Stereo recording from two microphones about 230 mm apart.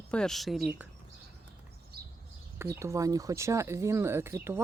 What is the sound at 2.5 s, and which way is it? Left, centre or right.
Speech, centre.